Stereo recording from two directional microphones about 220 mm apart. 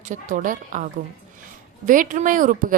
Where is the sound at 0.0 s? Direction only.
35° right (ahead or behind).